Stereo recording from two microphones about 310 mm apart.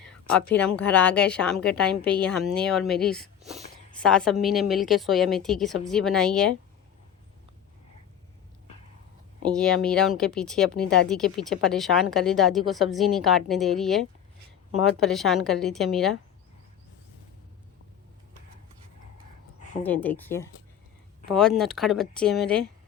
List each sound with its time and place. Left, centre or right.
0.0 s a sound: centre
0.8 s speech: centre
9.5 s speech: centre
19.8 s speech: centre